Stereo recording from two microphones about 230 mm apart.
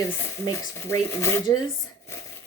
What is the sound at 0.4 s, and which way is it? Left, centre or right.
Speech, centre.